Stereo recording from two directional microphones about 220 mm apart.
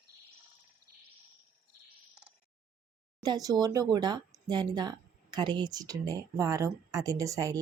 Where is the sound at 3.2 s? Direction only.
15° right (ahead or behind).